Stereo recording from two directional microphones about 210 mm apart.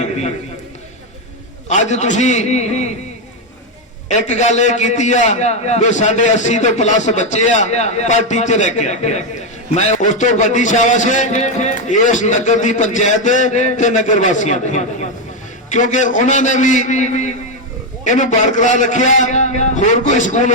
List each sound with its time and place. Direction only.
0.0 s a man's voice: 30° left (ahead or behind)
1.6 s a man's voice: 35° left (ahead or behind)
4.3 s a man's voice: 35° left (ahead or behind)